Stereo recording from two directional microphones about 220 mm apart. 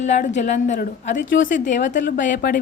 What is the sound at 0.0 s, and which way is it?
A woman's voice, 30° left (ahead or behind).